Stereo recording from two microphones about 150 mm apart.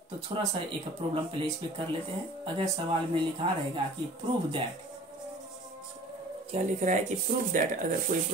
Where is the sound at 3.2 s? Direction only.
35° right (ahead or behind).